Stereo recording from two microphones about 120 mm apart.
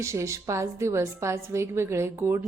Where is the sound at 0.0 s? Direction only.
25° right (ahead or behind).